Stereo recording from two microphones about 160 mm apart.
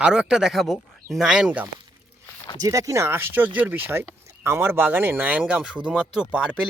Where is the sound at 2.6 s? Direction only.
20° right (ahead or behind).